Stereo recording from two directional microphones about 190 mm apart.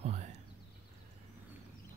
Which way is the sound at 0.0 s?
35° right (ahead or behind).